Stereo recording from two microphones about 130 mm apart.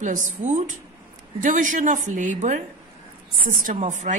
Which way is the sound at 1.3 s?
80° right.